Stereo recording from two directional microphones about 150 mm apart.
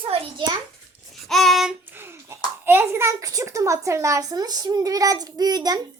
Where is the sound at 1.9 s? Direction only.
15° right (ahead or behind).